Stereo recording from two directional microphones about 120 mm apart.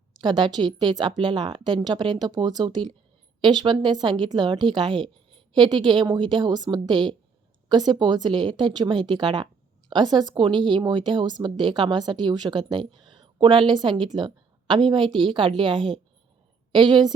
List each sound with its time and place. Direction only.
0.1 s a woman's voice: 40° right (ahead or behind)